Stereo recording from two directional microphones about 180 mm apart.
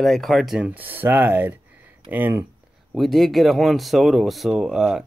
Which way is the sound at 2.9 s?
Centre (ahead or behind).